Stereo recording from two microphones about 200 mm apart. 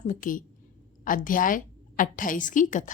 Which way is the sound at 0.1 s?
40° left (ahead or behind).